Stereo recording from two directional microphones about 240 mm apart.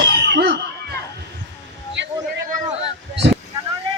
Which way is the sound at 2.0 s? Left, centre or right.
Right.